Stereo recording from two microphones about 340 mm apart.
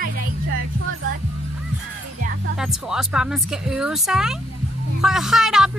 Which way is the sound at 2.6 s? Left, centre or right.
Centre.